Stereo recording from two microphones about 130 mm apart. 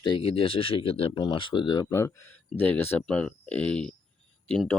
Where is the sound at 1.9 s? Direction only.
20° left (ahead or behind).